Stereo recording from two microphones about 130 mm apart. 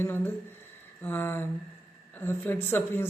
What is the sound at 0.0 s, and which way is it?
A woman's voice, 15° left (ahead or behind).